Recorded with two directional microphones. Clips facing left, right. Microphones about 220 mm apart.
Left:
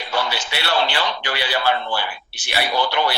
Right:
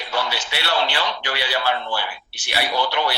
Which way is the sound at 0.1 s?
50° left (ahead or behind).